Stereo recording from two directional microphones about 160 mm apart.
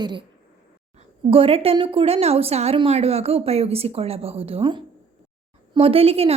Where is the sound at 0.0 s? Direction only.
30° right (ahead or behind).